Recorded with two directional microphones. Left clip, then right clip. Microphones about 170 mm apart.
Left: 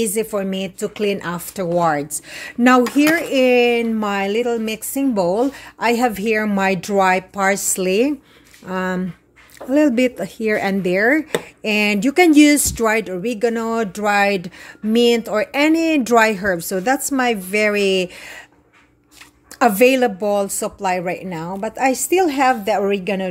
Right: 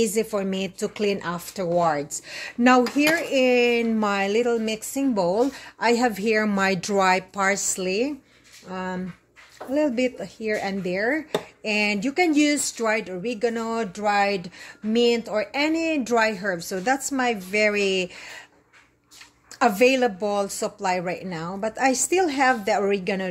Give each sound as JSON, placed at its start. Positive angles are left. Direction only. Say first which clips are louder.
{"t": 0.0, "sound": "a woman's voice", "louder": "left 3 dB", "side_deg": 10}
{"t": 7.4, "sound": "speech", "louder": "left 7 dB", "side_deg": 30}
{"t": 11.3, "sound": "speech", "louder": "left 5 dB", "side_deg": 40}
{"t": 19.6, "sound": "a woman's voice", "louder": "left 5 dB", "side_deg": 30}